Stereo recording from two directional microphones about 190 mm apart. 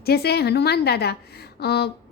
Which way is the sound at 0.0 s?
55° left (ahead or behind).